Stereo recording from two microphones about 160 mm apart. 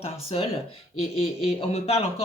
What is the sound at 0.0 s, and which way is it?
Speech, 40° left (ahead or behind).